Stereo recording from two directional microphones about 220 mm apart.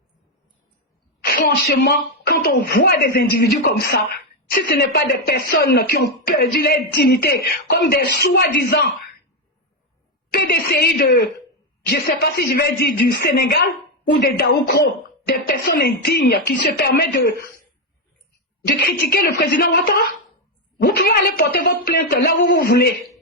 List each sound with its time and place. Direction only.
1.2 s speech: 45° left (ahead or behind)
10.3 s speech: 45° left (ahead or behind)
19.0 s speech: 45° left (ahead or behind)